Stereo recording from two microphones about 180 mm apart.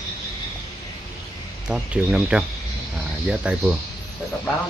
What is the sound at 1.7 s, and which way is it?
Speech, 5° right (ahead or behind).